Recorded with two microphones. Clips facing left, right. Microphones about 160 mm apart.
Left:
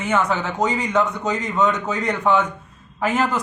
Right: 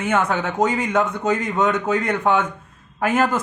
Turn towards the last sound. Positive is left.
turn(degrees=-50)  # may be behind; listen again after turning